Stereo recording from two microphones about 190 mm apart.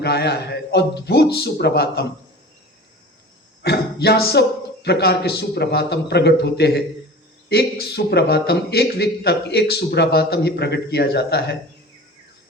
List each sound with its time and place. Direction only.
0.0 s a man's voice: 60° left (ahead or behind)
3.6 s a man's voice: 60° left (ahead or behind)